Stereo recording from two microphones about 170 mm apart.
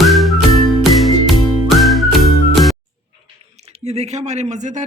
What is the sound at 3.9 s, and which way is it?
Speech, 40° right (ahead or behind).